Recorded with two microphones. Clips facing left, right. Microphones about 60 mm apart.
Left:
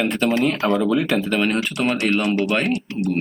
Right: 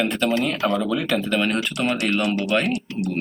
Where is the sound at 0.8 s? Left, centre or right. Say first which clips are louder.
Left 3 dB; centre.